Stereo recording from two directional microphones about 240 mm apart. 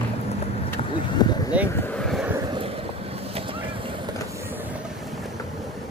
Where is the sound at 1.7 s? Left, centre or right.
Centre.